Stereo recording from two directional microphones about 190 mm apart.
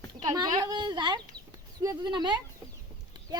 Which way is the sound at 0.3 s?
20° right (ahead or behind).